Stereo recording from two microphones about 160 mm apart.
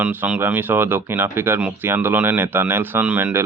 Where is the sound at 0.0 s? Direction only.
10° right (ahead or behind).